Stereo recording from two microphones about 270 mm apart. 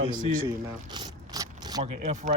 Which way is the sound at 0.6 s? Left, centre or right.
Centre.